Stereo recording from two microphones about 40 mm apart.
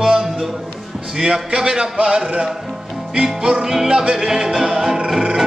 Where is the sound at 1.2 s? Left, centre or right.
Centre.